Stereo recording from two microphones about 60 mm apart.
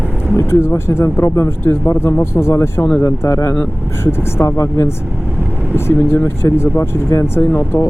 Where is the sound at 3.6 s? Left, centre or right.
Left.